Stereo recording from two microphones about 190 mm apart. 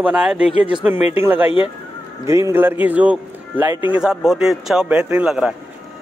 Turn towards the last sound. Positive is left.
turn(degrees=-5)  # may be behind; listen again after turning